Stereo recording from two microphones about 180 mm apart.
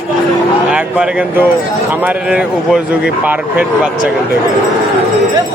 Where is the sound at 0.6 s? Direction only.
5° right (ahead or behind).